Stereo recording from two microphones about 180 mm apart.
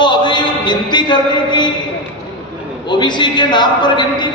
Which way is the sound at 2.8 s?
25° left (ahead or behind).